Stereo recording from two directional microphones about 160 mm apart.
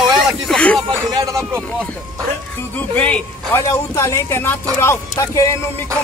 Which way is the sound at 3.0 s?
10° left (ahead or behind).